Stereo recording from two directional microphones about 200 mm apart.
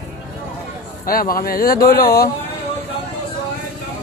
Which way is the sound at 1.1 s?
45° left (ahead or behind).